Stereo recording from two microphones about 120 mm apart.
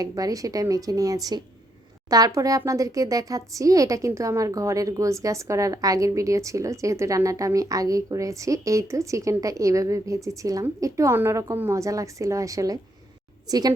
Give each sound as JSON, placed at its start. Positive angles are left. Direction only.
{"t": 0.0, "sound": "speech", "side_deg": -30}